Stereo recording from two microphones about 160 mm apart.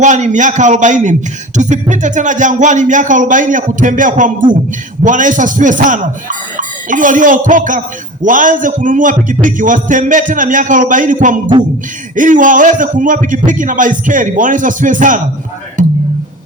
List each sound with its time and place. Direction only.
0.0 s a man's voice: 50° right (ahead or behind)
15.8 s music: 55° right (ahead or behind)